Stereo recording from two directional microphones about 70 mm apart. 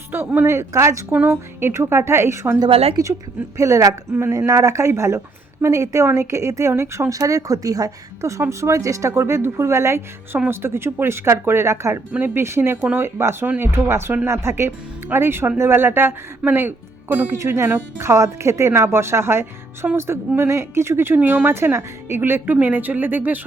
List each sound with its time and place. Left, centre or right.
0.1 s a woman's voice: right
1.1 s speech: right
3.0 s a woman's voice: right
12.1 s speech: right
17.3 s speech: right
21.2 s speech: right
21.4 s speech: right